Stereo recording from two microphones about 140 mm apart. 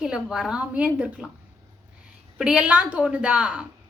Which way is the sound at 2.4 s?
5° right (ahead or behind).